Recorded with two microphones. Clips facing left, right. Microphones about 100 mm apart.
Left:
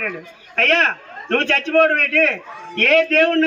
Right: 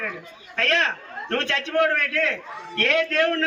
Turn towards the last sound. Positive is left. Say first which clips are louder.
# left 6 dB
turn(degrees=50)  # may be behind; listen again after turning